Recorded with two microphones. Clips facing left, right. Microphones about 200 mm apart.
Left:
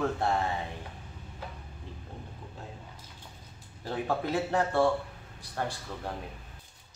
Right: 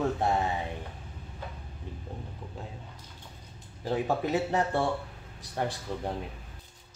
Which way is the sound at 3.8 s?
15° right (ahead or behind).